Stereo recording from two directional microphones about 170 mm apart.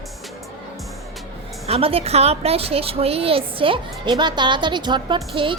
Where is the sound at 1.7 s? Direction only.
35° right (ahead or behind).